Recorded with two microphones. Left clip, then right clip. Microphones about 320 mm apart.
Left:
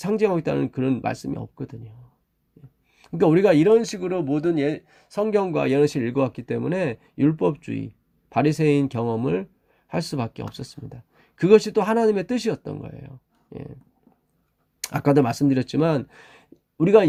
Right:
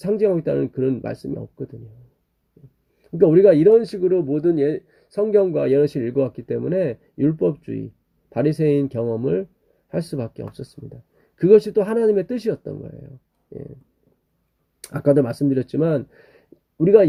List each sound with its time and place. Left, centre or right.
0.0 s speech: centre
3.0 s speech: centre
14.8 s speech: centre